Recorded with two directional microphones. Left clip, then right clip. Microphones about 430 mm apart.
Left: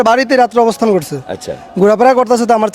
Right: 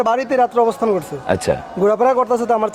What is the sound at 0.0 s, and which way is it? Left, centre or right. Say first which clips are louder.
A man's voice: left 6 dB; left.